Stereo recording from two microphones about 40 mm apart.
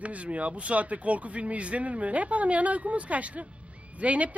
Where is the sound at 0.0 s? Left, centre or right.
Right.